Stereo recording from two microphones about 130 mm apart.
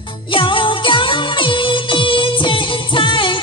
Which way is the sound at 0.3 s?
40° left (ahead or behind).